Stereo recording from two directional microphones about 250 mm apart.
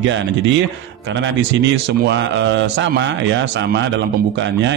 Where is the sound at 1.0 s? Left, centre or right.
Right.